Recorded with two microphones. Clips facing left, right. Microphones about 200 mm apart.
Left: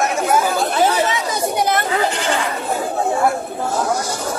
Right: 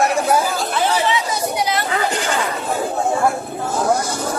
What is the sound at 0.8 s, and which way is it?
Chatter, 50° left (ahead or behind).